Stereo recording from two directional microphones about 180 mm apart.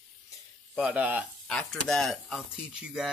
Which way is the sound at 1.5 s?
5° left (ahead or behind).